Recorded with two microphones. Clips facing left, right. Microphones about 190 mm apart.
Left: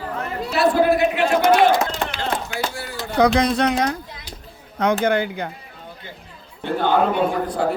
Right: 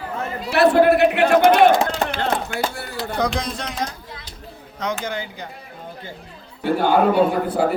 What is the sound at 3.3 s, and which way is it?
Speech, 65° left (ahead or behind).